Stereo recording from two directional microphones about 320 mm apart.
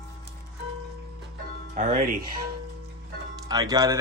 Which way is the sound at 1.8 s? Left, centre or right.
Right.